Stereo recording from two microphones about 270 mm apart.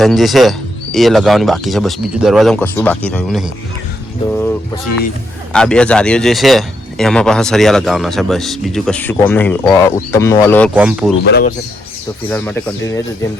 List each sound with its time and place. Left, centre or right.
0.0 s a man's voice: centre
5.5 s a man's voice: centre
10.8 s a man's voice: centre
11.2 s speech: left
12.3 s speech: centre